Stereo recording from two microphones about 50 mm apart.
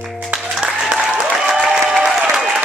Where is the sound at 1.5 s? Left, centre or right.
Centre.